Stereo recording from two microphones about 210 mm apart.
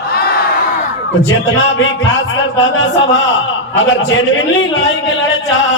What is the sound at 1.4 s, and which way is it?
Speech, 65° left (ahead or behind).